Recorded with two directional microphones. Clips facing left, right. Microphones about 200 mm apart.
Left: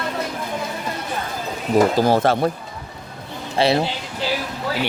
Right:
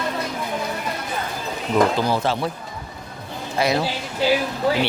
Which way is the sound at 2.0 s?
50° left (ahead or behind).